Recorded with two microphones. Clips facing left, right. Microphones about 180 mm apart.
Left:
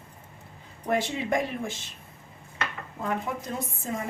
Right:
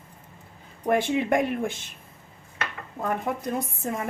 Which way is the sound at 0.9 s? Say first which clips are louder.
Right 4 dB; 55° right (ahead or behind).